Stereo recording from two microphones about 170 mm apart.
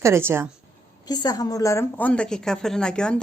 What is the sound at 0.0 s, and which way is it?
Speech, 15° right (ahead or behind).